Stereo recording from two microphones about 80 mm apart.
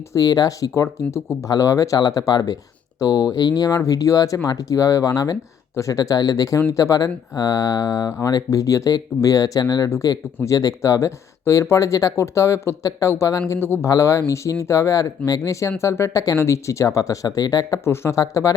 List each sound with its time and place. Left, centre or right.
0.1 s speech: left
17.8 s speech: left